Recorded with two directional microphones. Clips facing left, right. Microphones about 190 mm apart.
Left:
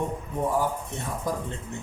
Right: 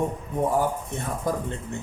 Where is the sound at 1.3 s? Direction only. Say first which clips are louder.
Right 3 dB; 55° right (ahead or behind).